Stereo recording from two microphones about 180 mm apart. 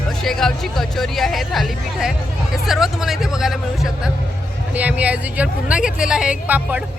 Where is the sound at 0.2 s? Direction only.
Centre (ahead or behind).